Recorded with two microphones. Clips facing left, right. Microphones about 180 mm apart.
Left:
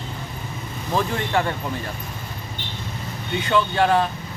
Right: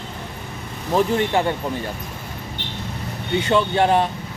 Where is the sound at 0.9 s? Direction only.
20° right (ahead or behind).